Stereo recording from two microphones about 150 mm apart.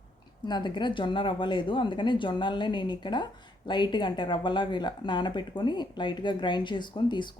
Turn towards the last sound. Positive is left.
turn(degrees=30)  # may be behind; listen again after turning